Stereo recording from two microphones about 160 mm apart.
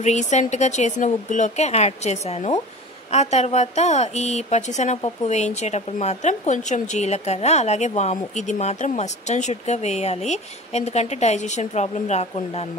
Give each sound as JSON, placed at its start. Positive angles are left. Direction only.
{"t": 0.0, "sound": "a woman's voice", "side_deg": 45}